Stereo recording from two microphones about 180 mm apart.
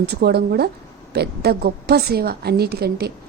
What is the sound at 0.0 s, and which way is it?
A woman's voice, 65° right (ahead or behind).